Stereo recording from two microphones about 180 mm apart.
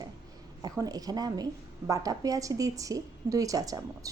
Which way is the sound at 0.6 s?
20° right (ahead or behind).